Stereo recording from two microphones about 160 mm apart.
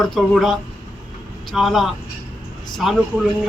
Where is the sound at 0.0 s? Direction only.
Centre (ahead or behind).